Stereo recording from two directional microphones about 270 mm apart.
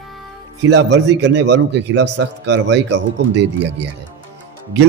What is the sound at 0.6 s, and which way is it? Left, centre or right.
A man's voice, right.